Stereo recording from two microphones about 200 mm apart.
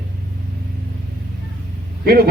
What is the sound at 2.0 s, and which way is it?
Speech, 50° right (ahead or behind).